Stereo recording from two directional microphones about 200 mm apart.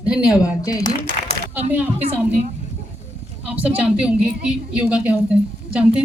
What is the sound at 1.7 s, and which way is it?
Speech, 10° right (ahead or behind).